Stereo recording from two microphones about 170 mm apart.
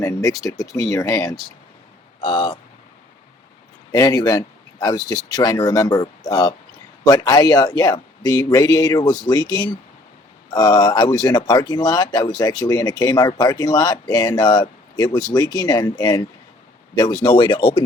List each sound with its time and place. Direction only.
0.0 s speech: 15° left (ahead or behind)
2.2 s speech: 30° left (ahead or behind)
3.9 s speech: 20° left (ahead or behind)